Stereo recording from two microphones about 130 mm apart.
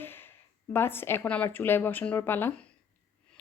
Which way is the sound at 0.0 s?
15° left (ahead or behind).